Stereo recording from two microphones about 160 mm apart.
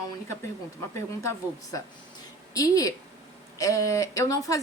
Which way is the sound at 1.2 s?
20° left (ahead or behind).